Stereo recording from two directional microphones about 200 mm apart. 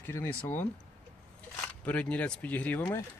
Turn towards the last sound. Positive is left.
turn(degrees=10)  # may be behind; listen again after turning